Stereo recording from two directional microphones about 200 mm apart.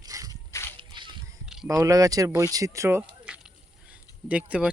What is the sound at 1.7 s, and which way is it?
Speech, 15° right (ahead or behind).